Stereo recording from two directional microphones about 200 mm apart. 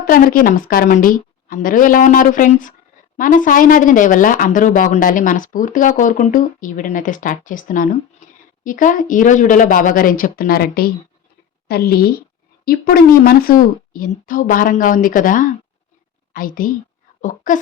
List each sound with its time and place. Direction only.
0.0 s a woman's voice: 45° left (ahead or behind)
8.2 s a sound: 40° left (ahead or behind)
8.6 s a woman's voice: 40° left (ahead or behind)